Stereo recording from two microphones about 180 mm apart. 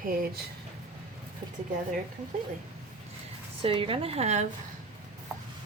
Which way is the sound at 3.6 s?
30° right (ahead or behind).